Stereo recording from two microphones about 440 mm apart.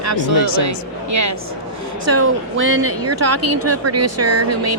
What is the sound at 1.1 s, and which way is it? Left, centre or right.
Speech, right.